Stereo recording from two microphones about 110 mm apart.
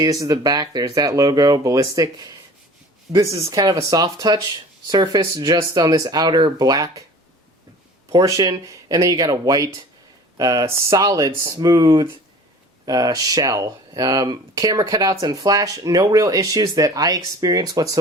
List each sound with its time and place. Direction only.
0.0 s speech: 35° right (ahead or behind)
5.2 s speech: 30° right (ahead or behind)
8.4 s speech: 30° right (ahead or behind)